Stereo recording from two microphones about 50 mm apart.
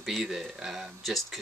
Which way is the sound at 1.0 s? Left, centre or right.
Centre.